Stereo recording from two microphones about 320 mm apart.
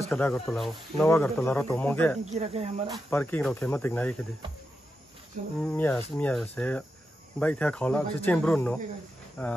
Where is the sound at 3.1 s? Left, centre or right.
Centre.